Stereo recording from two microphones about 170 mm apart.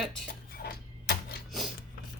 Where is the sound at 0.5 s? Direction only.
65° left (ahead or behind).